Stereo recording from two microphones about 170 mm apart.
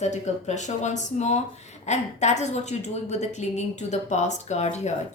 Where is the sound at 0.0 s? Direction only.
45° left (ahead or behind).